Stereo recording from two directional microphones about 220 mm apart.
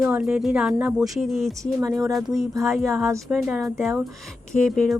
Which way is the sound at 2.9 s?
10° right (ahead or behind).